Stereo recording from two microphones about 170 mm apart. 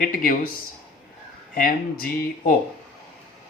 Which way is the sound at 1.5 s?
55° left (ahead or behind).